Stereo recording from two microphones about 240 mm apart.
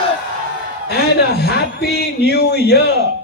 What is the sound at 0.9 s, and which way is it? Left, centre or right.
Speech, left.